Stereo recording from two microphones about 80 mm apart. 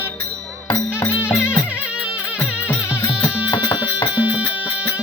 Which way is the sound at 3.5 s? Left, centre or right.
Left.